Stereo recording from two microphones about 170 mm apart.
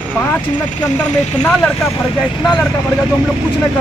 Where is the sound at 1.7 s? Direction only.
15° left (ahead or behind).